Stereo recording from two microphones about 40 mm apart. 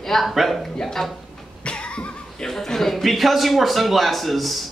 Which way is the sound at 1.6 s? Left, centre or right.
Left.